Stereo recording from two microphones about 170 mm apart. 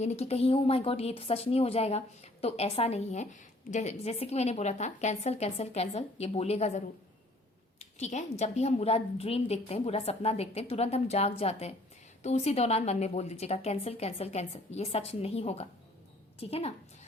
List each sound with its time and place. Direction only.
0.0 s a woman's voice: 40° left (ahead or behind)